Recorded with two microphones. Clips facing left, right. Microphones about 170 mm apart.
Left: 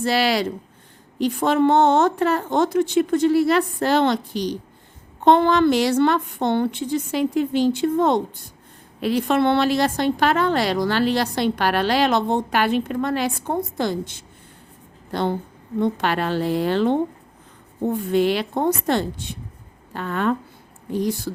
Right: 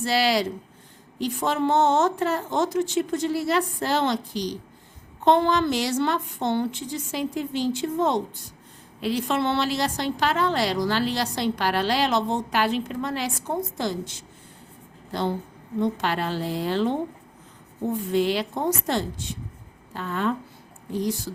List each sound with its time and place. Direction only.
0.0 s a woman's voice: 60° left (ahead or behind)